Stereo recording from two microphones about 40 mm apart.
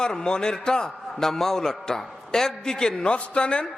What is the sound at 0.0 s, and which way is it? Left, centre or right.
A man's voice, centre.